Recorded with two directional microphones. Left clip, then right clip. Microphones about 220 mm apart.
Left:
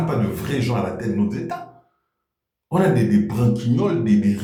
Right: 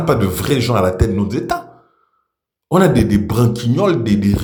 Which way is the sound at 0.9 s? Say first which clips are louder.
Right 6 dB; 40° right (ahead or behind).